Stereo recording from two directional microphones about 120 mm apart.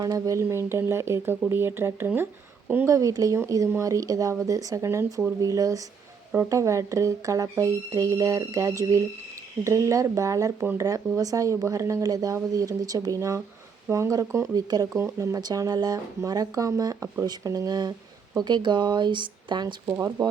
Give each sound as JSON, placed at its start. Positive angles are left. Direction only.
{"t": 0.0, "sound": "speech", "side_deg": -30}
{"t": 2.9, "sound": "speech", "side_deg": -30}
{"t": 19.9, "sound": "speech", "side_deg": -25}